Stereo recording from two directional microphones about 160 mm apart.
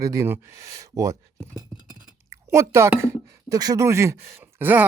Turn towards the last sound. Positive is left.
turn(degrees=-10)  # may be behind; listen again after turning